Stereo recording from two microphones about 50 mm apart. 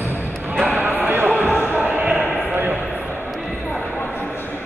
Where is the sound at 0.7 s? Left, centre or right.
Right.